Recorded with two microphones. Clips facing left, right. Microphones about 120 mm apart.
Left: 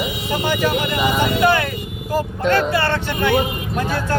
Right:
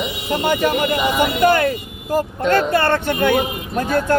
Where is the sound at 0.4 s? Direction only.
45° right (ahead or behind).